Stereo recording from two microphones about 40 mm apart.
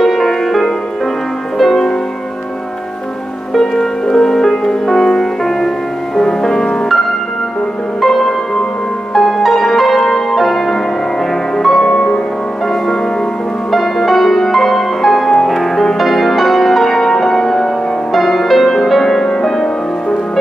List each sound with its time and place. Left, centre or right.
0.0 s music: centre
3.5 s music: centre
8.0 s music: centre
11.8 s music: left
13.7 s music: centre